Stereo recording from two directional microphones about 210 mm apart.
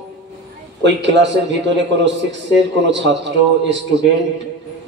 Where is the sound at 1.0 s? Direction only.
60° right (ahead or behind).